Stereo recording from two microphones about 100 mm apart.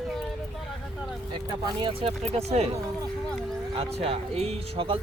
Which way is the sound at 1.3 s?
50° right (ahead or behind).